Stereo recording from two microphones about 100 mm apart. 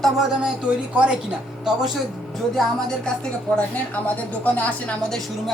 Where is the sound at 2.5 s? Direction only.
5° left (ahead or behind).